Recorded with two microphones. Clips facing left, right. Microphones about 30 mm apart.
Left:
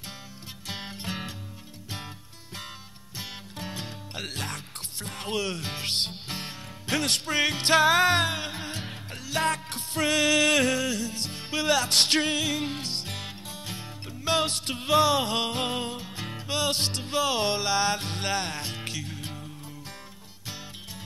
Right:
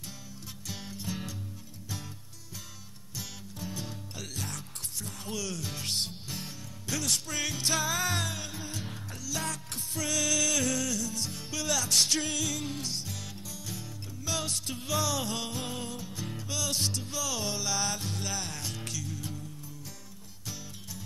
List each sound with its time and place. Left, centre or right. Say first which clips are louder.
0.7 s music: left 4 dB; left
3.5 s music: left 2 dB; left